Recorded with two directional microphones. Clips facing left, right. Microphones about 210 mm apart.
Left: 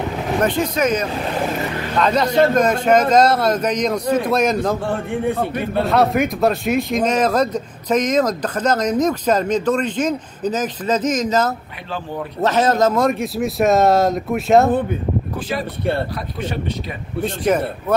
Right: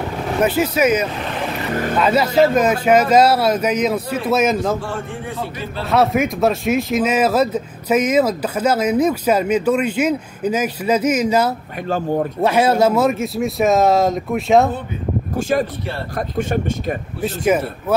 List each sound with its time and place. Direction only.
0.4 s speech: 5° right (ahead or behind)
4.8 s a man's voice: 55° left (ahead or behind)
5.9 s speech: centre (ahead or behind)
11.9 s speech: 45° right (ahead or behind)
12.4 s speech: 10° right (ahead or behind)
16.2 s speech: 50° right (ahead or behind)
17.2 s speech: 5° right (ahead or behind)